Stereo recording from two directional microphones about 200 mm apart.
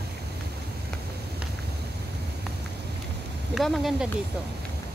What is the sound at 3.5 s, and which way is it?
Speech, centre (ahead or behind).